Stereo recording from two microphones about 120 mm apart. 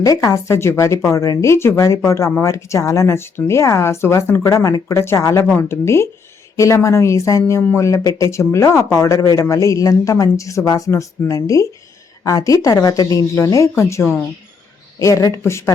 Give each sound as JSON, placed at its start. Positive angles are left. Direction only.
{"t": 0.0, "sound": "a woman's voice", "side_deg": 25}